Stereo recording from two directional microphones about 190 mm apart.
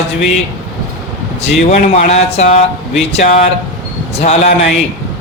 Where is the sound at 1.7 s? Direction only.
35° left (ahead or behind).